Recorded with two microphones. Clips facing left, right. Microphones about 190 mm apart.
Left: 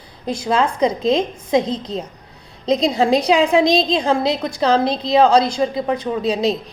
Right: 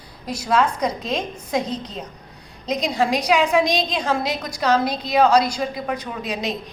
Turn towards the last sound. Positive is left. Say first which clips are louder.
# left 8 dB
turn(degrees=30)  # may be behind; listen again after turning